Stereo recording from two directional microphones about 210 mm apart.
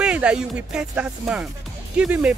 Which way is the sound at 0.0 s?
5° right (ahead or behind).